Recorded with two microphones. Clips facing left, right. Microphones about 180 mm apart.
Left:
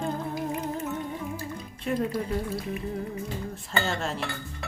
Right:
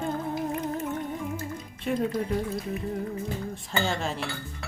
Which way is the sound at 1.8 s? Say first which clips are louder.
Right 1 dB; 5° left (ahead or behind).